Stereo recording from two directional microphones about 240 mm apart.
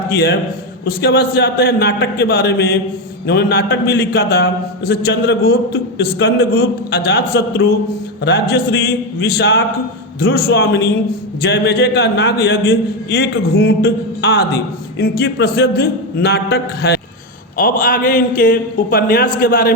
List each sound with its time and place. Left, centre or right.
0.1 s a man's voice: left